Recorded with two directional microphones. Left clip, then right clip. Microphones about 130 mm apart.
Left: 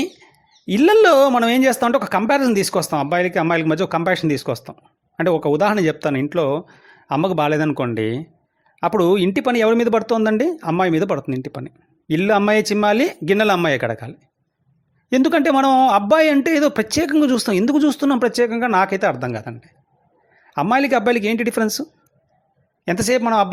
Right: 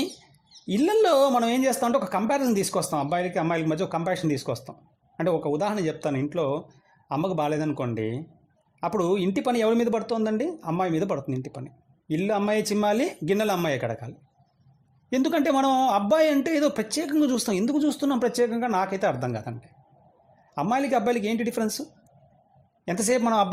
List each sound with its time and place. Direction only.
0.6 s speech: 25° left (ahead or behind)
5.3 s speech: 35° left (ahead or behind)
19.1 s a man's voice: 10° left (ahead or behind)
20.5 s speech: 20° left (ahead or behind)
22.9 s a man's voice: 15° left (ahead or behind)